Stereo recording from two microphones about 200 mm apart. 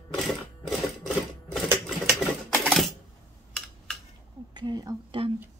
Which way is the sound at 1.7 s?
Centre (ahead or behind).